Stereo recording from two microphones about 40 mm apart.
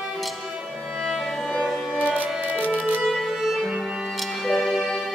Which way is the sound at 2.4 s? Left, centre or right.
Right.